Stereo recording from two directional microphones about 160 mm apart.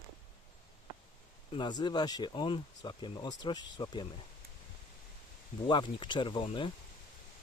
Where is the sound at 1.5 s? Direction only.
30° left (ahead or behind).